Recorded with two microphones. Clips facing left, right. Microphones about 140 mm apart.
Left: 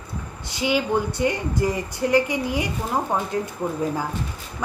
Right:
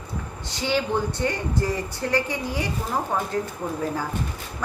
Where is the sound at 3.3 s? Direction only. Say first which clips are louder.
Left 1 dB; 35° right (ahead or behind).